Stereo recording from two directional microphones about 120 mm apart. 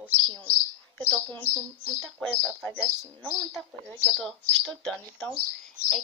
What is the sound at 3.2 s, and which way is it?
A woman's voice, 10° left (ahead or behind).